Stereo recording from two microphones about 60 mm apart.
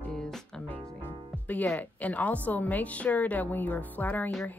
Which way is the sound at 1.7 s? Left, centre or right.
Left.